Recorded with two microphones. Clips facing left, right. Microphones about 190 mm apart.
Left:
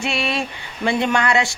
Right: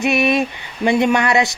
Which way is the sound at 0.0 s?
20° right (ahead or behind).